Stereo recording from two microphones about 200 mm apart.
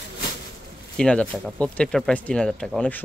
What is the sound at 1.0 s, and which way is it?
A man's voice, 5° left (ahead or behind).